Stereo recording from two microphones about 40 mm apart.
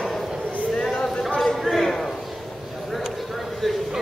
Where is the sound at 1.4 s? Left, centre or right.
Centre.